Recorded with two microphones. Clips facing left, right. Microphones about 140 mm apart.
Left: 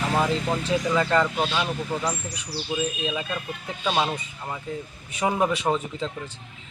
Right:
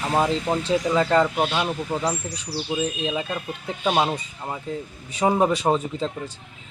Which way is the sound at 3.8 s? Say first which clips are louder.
Right 3 dB; 20° right (ahead or behind).